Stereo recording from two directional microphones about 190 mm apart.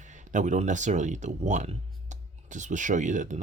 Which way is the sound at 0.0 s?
40° right (ahead or behind).